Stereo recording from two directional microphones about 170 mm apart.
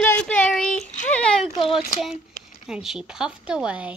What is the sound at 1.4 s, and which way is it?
Speech, 30° left (ahead or behind).